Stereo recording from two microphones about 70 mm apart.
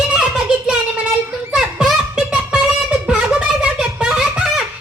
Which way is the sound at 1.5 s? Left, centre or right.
Centre.